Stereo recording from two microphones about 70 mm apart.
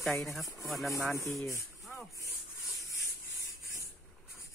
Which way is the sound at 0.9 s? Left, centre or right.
Left.